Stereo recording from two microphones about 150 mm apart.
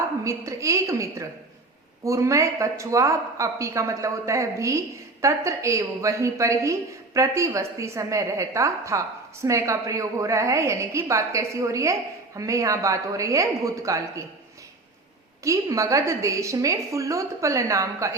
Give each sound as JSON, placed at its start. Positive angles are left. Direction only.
{"t": 0.3, "sound": "a woman's voice", "side_deg": -20}
{"t": 15.4, "sound": "a woman's voice", "side_deg": -20}